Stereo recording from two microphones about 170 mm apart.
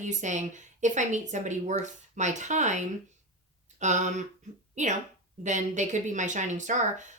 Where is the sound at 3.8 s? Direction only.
45° right (ahead or behind).